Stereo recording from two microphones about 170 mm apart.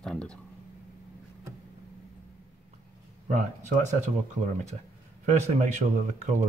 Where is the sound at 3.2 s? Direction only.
50° right (ahead or behind).